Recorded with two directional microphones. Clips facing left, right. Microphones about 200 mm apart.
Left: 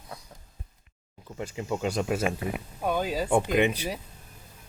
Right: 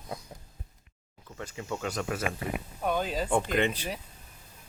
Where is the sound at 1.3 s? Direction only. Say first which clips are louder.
Left 5 dB; 20° left (ahead or behind).